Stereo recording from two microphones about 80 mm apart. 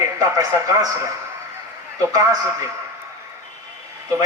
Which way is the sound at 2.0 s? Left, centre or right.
Right.